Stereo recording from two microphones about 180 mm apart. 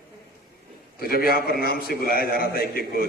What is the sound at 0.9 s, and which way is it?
A man's voice, 55° left (ahead or behind).